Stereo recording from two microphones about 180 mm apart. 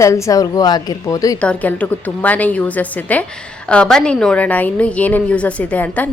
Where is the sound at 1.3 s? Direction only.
5° left (ahead or behind).